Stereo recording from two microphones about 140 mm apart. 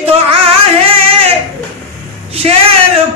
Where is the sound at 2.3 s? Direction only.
45° right (ahead or behind).